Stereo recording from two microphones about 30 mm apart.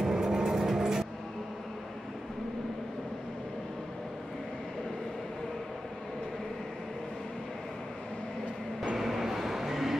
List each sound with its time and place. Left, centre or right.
0.0 s music: right
8.9 s train: centre